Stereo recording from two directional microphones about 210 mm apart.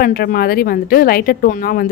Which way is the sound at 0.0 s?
45° left (ahead or behind).